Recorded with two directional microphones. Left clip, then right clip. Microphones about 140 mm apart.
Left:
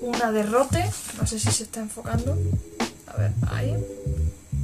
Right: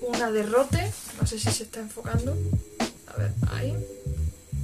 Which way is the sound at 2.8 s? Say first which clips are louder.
Left 1 dB; centre (ahead or behind).